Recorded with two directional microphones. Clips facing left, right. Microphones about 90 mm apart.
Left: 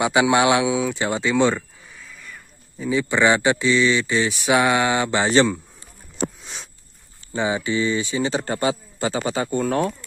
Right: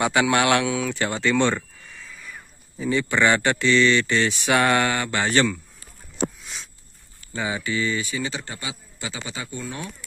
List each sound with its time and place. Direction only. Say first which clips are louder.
0.0 s a sound: left 3 dB; 15° left (ahead or behind); by 2.9 s centre (ahead or behind)
2.9 s speech: left 2 dB; 10° left (ahead or behind)
6.4 s livestock: left 1 dB; 30° left (ahead or behind)
7.3 s a man's voice: left 4 dB; 25° left (ahead or behind); by 9.8 s 50° left (ahead or behind)